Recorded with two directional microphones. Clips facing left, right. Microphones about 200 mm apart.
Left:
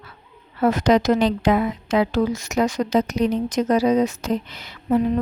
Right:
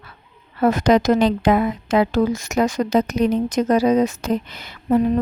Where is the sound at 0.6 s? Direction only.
50° right (ahead or behind).